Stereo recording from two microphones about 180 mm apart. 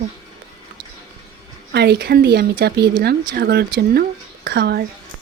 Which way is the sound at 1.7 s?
65° right (ahead or behind).